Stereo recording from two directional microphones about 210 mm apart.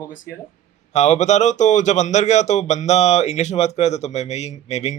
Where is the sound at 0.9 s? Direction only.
30° left (ahead or behind).